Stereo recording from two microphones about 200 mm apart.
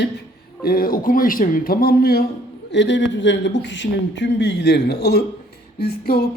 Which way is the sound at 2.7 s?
60° left (ahead or behind).